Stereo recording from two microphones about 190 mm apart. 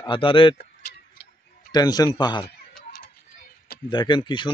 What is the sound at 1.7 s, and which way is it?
Speech, 20° left (ahead or behind).